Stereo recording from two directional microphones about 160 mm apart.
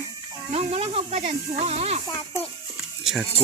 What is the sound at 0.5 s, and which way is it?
Speech, 40° right (ahead or behind).